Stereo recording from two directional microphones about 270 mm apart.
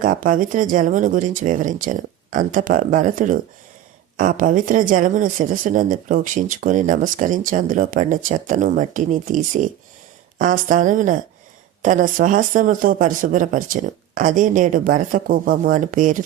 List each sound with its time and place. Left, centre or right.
0.0 s speech: right